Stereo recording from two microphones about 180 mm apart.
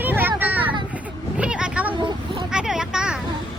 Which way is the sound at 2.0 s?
25° right (ahead or behind).